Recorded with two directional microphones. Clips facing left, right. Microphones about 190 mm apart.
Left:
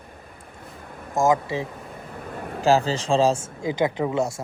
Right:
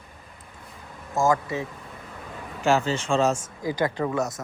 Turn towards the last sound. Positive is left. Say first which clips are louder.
# left 2 dB
turn(degrees=15)  # may be behind; listen again after turning